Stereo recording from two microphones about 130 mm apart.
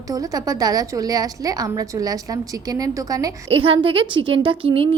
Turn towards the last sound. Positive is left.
turn(degrees=-45)  # may be behind; listen again after turning